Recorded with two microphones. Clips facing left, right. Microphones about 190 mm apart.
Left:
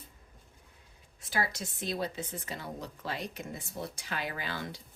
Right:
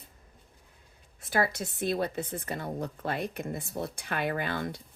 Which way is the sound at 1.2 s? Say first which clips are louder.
Right 6 dB; 55° right (ahead or behind).